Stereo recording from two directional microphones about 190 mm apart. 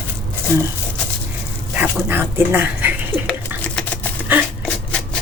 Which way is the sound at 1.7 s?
10° right (ahead or behind).